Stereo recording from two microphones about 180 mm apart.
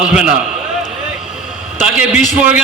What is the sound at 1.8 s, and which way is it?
Speech, 5° right (ahead or behind).